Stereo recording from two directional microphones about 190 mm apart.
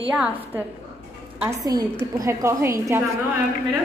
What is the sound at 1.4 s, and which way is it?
A woman's voice, 20° right (ahead or behind).